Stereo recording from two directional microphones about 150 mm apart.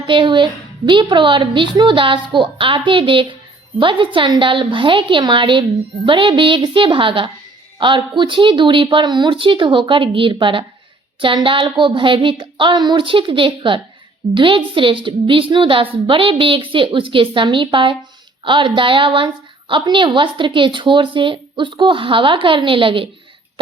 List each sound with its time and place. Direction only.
0.1 s a woman's voice: 35° right (ahead or behind)